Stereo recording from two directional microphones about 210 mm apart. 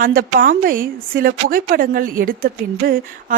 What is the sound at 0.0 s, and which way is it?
A woman's voice, 45° right (ahead or behind).